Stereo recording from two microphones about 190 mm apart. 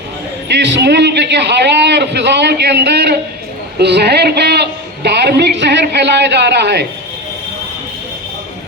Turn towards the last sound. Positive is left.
turn(degrees=-65)  # may be behind; listen again after turning